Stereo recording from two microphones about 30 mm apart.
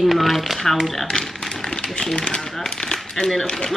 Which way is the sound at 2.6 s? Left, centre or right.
Centre.